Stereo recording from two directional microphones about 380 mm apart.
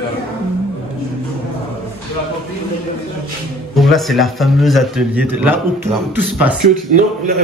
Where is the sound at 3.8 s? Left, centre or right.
Centre.